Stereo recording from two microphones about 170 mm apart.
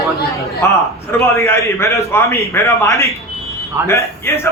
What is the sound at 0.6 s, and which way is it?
A man's voice, 15° left (ahead or behind).